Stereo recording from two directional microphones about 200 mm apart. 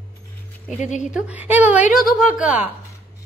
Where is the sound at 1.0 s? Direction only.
5° right (ahead or behind).